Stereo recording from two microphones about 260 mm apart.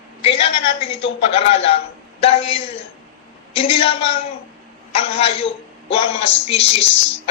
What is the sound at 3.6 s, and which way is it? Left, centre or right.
A man's voice, left.